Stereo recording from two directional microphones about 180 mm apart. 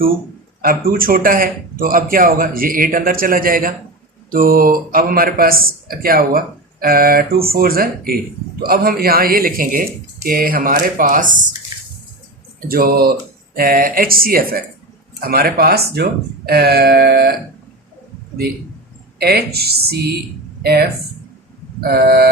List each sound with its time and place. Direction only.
0.6 s speech: 55° right (ahead or behind)
11.7 s a sound: 25° right (ahead or behind)
12.6 s speech: 55° right (ahead or behind)
19.2 s speech: 60° right (ahead or behind)